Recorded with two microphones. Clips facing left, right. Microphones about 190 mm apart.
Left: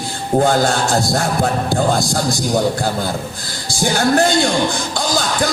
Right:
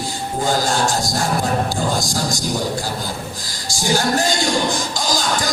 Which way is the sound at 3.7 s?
60° left (ahead or behind).